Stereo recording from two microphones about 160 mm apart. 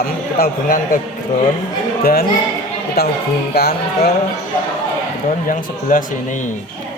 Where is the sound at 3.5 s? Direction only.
80° left.